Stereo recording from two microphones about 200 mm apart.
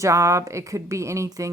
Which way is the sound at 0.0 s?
15° right (ahead or behind).